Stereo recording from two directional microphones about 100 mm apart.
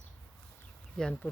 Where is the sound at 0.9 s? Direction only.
10° left (ahead or behind).